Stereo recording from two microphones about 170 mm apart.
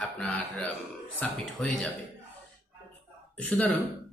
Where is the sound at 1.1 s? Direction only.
5° left (ahead or behind).